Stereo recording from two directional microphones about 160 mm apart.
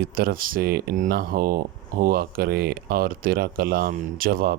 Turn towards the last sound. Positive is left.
turn(degrees=-65)  # may be behind; listen again after turning